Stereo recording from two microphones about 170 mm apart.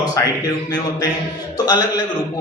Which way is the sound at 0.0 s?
20° left (ahead or behind).